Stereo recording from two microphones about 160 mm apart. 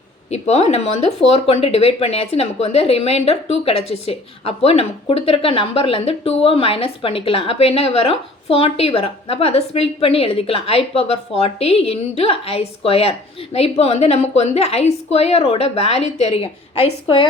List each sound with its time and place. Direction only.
0.3 s speech: 45° left (ahead or behind)